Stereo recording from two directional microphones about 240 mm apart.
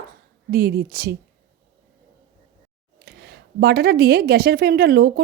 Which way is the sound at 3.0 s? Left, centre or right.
Right.